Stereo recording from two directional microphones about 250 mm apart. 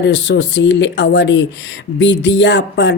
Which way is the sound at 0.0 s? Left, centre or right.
Left.